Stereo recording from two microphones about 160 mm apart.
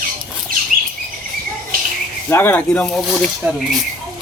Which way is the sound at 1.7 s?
65° right (ahead or behind).